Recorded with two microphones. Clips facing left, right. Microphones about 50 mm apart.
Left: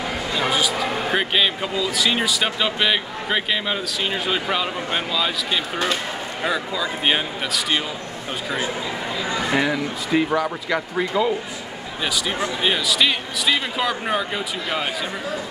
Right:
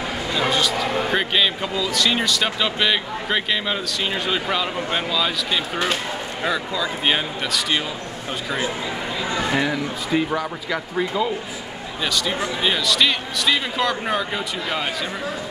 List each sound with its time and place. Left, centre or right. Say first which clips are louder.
0.4 s speech: right 1 dB; centre
9.6 s speech: left 1 dB; centre